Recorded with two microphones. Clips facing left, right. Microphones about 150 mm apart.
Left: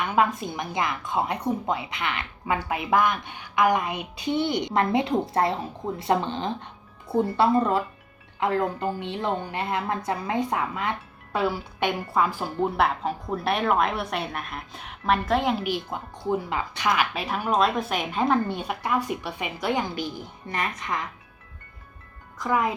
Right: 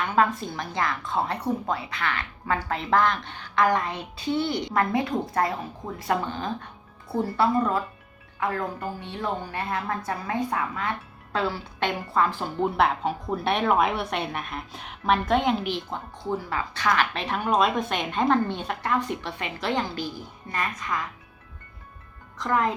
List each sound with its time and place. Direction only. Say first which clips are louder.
0.0 s a woman's voice: even; 15° left (ahead or behind)
22.4 s speech: even; 10° left (ahead or behind)